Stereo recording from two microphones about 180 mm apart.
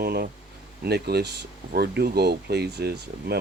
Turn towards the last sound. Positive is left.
turn(degrees=-65)  # may be behind; listen again after turning